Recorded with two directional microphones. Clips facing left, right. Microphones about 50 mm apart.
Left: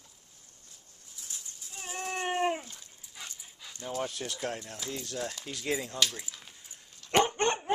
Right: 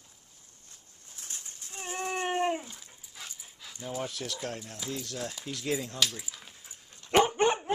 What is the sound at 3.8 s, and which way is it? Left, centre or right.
Speech, centre.